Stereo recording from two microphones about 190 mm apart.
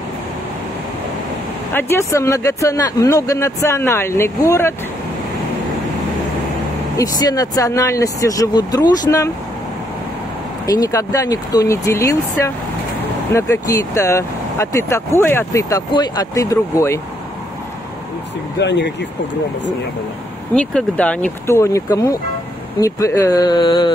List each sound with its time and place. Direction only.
1.7 s speech: 10° left (ahead or behind)
7.0 s speech: 20° left (ahead or behind)
10.7 s speech: 15° left (ahead or behind)
18.6 s speech: 65° left (ahead or behind)
20.5 s speech: 5° left (ahead or behind); by 23.9 s 25° left (ahead or behind)